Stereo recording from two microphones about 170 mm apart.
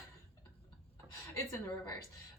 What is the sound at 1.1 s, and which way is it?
Speech, 15° left (ahead or behind).